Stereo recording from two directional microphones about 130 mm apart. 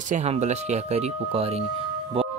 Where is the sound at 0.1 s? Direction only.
60° right (ahead or behind).